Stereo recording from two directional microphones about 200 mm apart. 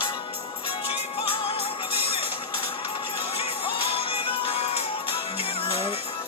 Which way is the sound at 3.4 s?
25° left (ahead or behind).